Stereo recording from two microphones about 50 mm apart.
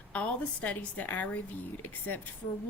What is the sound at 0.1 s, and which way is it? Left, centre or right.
A woman's voice, left.